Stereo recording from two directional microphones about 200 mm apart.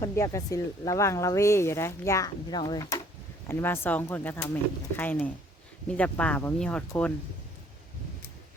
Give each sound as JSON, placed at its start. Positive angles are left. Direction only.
{"t": 0.0, "sound": "speech", "side_deg": 15}